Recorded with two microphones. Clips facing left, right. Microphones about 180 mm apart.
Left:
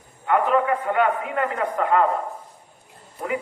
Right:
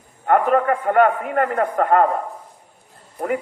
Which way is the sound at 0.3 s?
50° right (ahead or behind).